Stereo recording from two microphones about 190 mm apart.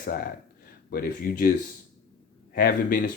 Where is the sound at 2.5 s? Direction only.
50° left (ahead or behind).